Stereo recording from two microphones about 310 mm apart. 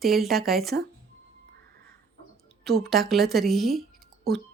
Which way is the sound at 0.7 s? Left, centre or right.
Right.